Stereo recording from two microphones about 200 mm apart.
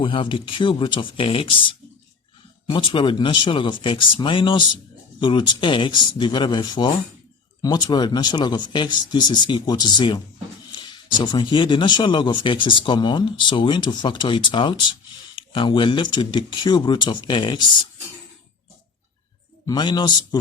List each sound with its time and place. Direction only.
0.0 s speech: 25° left (ahead or behind)
19.6 s speech: 20° left (ahead or behind)